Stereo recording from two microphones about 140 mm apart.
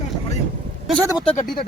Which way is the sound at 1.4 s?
90° left.